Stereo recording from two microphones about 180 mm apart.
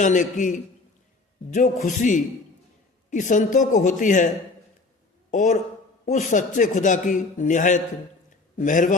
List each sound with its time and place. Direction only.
0.0 s a man's voice: 45° left (ahead or behind)
1.5 s a man's voice: 45° left (ahead or behind)
5.3 s a man's voice: 45° left (ahead or behind)